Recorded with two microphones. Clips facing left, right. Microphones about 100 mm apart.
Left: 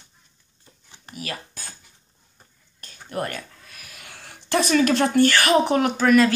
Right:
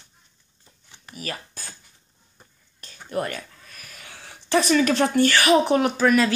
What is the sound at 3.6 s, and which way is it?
Pig, 40° right (ahead or behind).